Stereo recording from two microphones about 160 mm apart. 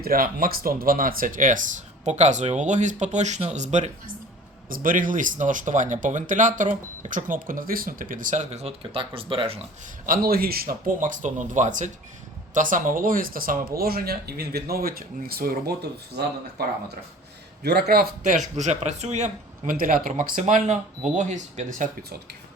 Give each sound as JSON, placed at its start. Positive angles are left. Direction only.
{"t": 0.0, "sound": "speech", "side_deg": -65}
{"t": 4.7, "sound": "speech", "side_deg": -55}
{"t": 10.1, "sound": "speech", "side_deg": -70}
{"t": 19.7, "sound": "speech", "side_deg": -60}